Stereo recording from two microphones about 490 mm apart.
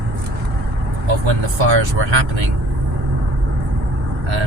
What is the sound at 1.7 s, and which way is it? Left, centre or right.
Speech, right.